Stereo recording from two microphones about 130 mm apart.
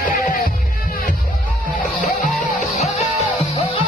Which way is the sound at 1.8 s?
75° left (ahead or behind).